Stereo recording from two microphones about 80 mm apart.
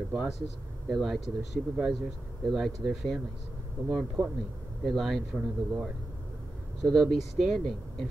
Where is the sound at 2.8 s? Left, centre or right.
Right.